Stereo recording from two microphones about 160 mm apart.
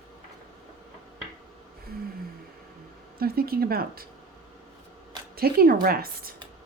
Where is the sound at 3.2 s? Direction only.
70° right (ahead or behind).